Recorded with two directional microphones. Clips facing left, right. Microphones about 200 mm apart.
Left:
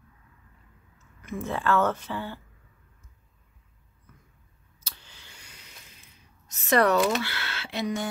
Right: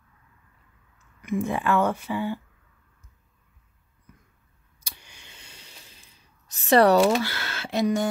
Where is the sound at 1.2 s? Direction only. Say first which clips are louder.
Right 5 dB; 15° right (ahead or behind).